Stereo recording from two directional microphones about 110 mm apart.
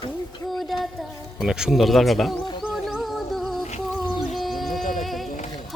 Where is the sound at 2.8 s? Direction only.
Centre (ahead or behind).